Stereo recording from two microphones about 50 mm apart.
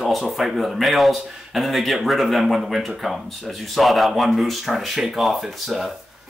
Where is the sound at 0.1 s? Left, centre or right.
Centre.